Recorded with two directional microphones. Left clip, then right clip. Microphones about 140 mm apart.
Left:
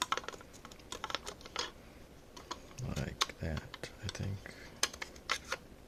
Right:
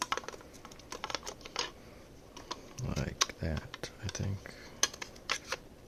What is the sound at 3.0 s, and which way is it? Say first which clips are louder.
Speech: right 3 dB; 20° right (ahead or behind).